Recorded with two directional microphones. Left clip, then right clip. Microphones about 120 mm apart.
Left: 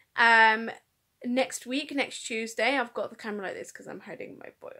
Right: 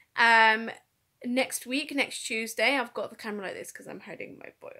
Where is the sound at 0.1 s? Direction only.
30° right (ahead or behind).